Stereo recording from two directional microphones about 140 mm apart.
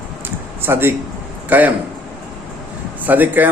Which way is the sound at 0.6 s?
15° right (ahead or behind).